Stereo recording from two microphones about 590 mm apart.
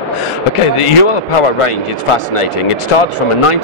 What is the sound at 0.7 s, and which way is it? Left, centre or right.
A man's voice, left.